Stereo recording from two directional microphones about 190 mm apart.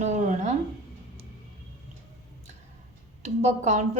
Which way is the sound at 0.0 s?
40° right (ahead or behind).